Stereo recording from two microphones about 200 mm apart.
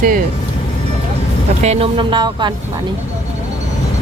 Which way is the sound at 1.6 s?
30° right (ahead or behind).